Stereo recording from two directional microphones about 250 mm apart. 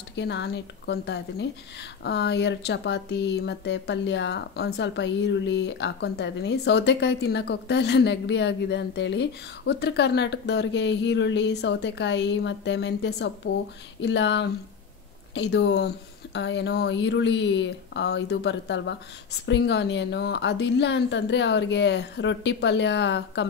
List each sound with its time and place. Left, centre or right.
0.1 s speech: left